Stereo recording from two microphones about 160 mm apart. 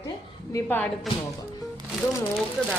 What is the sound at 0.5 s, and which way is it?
Speech, 15° left (ahead or behind).